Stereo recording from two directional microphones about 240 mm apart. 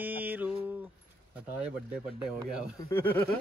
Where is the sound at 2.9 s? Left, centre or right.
Centre.